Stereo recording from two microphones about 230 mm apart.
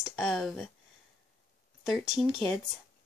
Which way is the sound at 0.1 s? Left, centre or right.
Centre.